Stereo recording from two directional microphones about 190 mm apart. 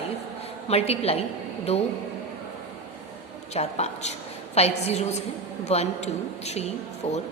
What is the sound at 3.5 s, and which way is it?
A woman's voice, 35° left (ahead or behind).